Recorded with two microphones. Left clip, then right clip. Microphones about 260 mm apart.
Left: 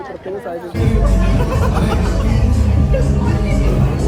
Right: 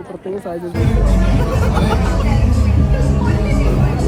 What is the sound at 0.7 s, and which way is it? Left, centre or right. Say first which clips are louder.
Speech: left 1 dB; centre.